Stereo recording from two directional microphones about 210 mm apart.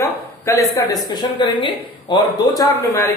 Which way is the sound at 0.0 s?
15° left (ahead or behind).